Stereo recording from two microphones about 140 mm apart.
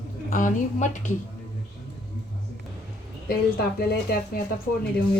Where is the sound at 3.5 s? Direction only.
90° left.